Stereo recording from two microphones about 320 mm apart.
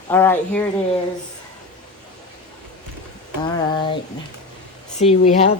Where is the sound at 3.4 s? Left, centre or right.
Centre.